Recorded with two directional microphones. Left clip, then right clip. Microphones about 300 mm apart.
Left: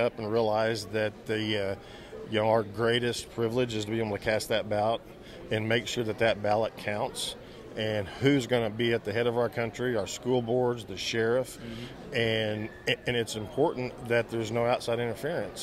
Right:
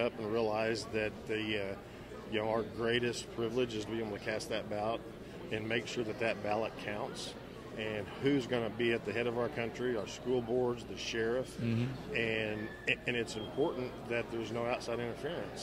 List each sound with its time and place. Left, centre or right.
0.0 s a man's voice: left